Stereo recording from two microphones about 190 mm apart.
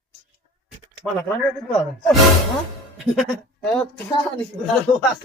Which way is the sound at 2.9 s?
Centre (ahead or behind).